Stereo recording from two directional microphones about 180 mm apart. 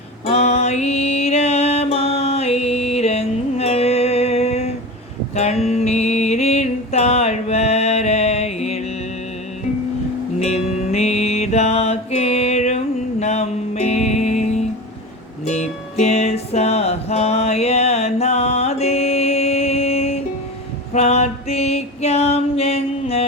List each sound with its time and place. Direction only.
0.3 s music: 35° left (ahead or behind)
10.4 s music: 35° left (ahead or behind)